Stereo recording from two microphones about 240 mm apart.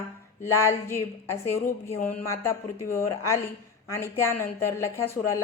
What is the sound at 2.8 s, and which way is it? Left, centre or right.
A woman's voice, centre.